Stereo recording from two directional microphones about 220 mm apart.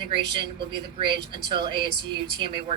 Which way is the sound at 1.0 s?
20° right (ahead or behind).